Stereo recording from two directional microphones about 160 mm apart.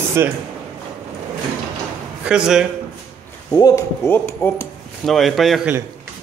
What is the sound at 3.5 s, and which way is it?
Speech, 25° left (ahead or behind).